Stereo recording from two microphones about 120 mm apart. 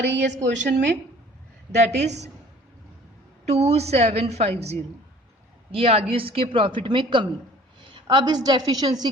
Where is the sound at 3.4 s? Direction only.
65° right (ahead or behind).